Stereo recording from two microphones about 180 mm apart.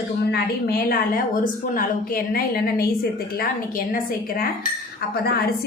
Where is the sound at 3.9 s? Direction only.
55° left (ahead or behind).